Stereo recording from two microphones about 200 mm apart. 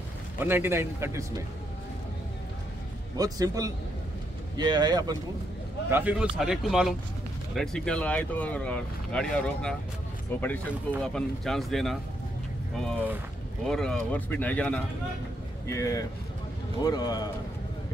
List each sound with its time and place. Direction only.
0.4 s a man's voice: 10° right (ahead or behind)
3.2 s a man's voice: 20° right (ahead or behind)
5.9 s speech: 10° right (ahead or behind)
13.7 s speech: 5° left (ahead or behind); by 17.3 s 20° left (ahead or behind)